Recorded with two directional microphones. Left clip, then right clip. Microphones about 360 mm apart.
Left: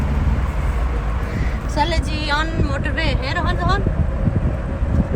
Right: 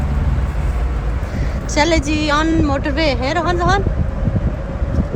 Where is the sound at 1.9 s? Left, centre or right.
Centre.